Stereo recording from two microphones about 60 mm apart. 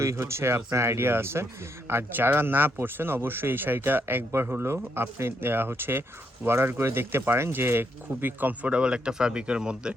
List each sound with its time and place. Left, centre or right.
0.0 s speech: right
8.7 s speech: centre